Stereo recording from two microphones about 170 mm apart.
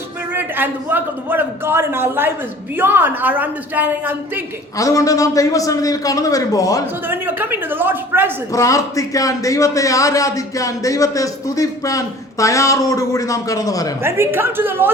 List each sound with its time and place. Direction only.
0.3 s a man's voice: 10° right (ahead or behind)
4.8 s a man's voice: 20° left (ahead or behind)
7.1 s a man's voice: 10° right (ahead or behind)
8.5 s a man's voice: 20° left (ahead or behind)
14.0 s a man's voice: 15° right (ahead or behind)